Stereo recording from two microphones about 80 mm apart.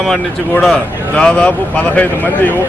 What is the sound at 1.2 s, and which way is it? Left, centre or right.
Speech, centre.